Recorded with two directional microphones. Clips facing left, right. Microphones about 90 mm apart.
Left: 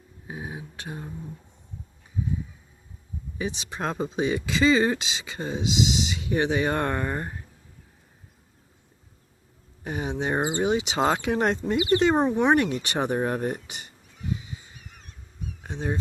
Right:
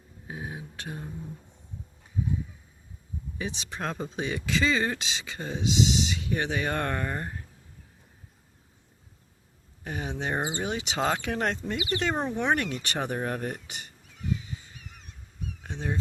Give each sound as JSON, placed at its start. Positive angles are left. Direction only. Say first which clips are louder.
{"t": 0.3, "sound": "a sound", "louder": "left 2 dB", "side_deg": 5}
{"t": 3.3, "sound": "speech", "louder": "left 4 dB", "side_deg": 10}
{"t": 9.8, "sound": "speech", "louder": "left 4 dB", "side_deg": 15}
{"t": 15.6, "sound": "speech", "louder": "left 4 dB", "side_deg": 20}